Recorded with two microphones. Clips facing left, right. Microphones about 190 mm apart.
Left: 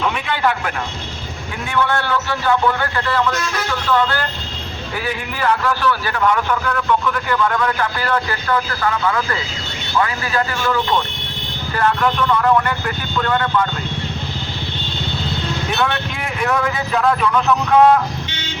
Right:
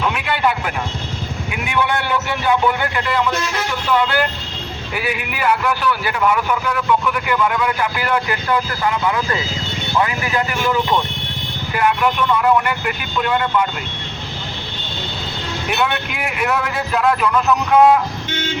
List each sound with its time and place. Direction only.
0.0 s a man's voice: 5° right (ahead or behind)
15.7 s a man's voice: 10° right (ahead or behind)
18.3 s vehicle: 50° right (ahead or behind)